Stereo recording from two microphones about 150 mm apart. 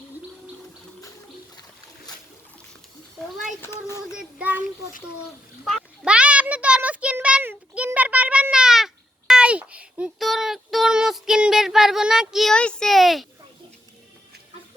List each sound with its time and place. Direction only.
3.6 s speech: 20° left (ahead or behind)
4.1 s child singing: 5° right (ahead or behind)
5.6 s a sound: centre (ahead or behind)